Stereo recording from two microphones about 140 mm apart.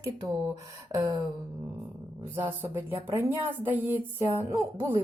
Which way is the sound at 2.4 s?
15° right (ahead or behind).